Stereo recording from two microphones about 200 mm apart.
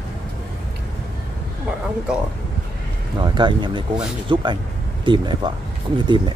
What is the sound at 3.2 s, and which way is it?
Speech, 25° right (ahead or behind).